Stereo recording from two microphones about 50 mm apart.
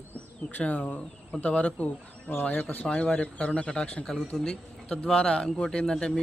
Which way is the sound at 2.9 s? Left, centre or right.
Centre.